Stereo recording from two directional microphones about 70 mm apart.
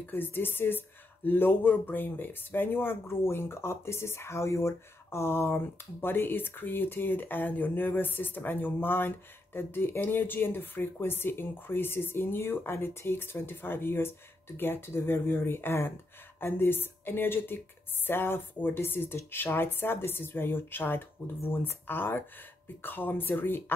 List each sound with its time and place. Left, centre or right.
0.0 s speech: left